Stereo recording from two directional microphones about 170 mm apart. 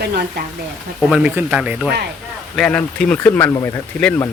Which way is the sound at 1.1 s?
5° right (ahead or behind).